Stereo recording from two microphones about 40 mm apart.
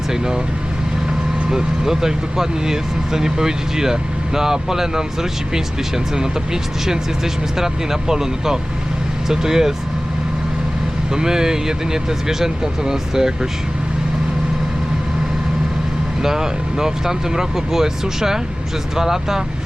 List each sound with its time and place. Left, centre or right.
1.5 s speech: centre
6.1 s speech: centre
11.1 s speech: centre
16.2 s speech: centre